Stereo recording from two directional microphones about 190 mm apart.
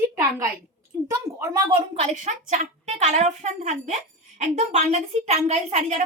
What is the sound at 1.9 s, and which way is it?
A woman's voice, 35° right (ahead or behind).